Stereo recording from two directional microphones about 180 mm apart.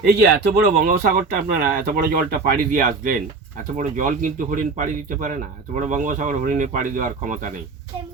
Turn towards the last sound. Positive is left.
turn(degrees=-45)  # may be behind; listen again after turning